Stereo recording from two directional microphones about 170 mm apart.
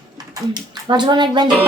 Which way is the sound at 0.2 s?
25° right (ahead or behind).